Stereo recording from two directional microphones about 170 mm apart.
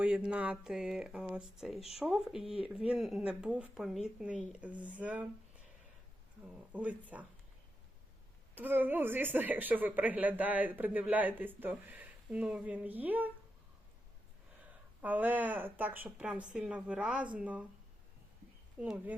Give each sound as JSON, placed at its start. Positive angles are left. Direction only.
{"t": 0.0, "sound": "speech", "side_deg": -5}
{"t": 6.7, "sound": "a woman's voice", "side_deg": -10}
{"t": 8.5, "sound": "a woman's voice", "side_deg": -10}
{"t": 14.6, "sound": "a woman's voice", "side_deg": -10}
{"t": 18.8, "sound": "a woman's voice", "side_deg": -5}